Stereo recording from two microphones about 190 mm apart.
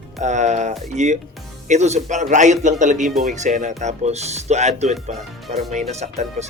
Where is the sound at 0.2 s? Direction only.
40° right (ahead or behind).